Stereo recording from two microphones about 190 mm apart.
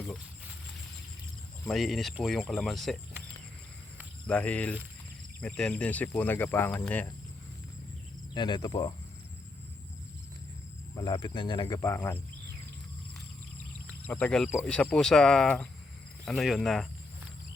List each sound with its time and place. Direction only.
1.6 s speech: centre (ahead or behind)
4.3 s speech: 5° left (ahead or behind)
8.3 s speech: 25° left (ahead or behind)
10.9 s speech: 20° left (ahead or behind)
14.1 s speech: 5° left (ahead or behind)